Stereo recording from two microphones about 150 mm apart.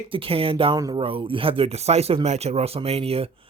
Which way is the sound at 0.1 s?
40° right (ahead or behind).